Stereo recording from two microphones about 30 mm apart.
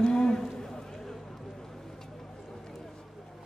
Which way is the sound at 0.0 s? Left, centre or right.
Left.